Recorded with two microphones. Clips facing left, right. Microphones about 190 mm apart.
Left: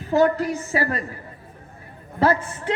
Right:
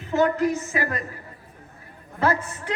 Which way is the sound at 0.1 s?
35° left (ahead or behind).